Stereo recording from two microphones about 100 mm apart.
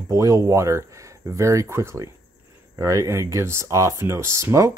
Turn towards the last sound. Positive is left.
turn(degrees=-30)  # may be behind; listen again after turning